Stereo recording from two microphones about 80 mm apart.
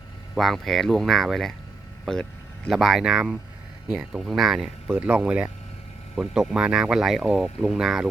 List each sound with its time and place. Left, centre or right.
0.3 s speech: centre
4.3 s speech: centre
4.9 s speech: centre